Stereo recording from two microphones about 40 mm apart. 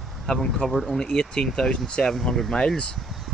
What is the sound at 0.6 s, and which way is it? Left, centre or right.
Speech, centre.